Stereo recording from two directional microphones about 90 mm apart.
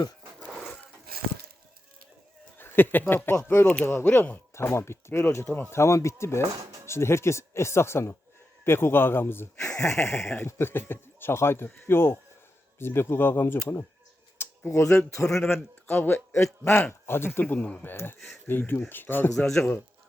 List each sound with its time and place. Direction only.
2.6 s speech: 25° left (ahead or behind)
5.5 s speech: 15° left (ahead or behind)
5.7 s speech: 30° left (ahead or behind)
6.5 s speech: 40° right (ahead or behind)
6.8 s speech: 30° left (ahead or behind)
9.6 s a sound: 5° left (ahead or behind)
10.3 s speech: 25° left (ahead or behind)
15.2 s a man's voice: 5° left (ahead or behind)
15.4 s speech: 25° left (ahead or behind)
19.4 s speech: 10° left (ahead or behind)